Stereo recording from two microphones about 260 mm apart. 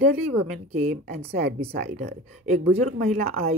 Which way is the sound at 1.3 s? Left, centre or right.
Right.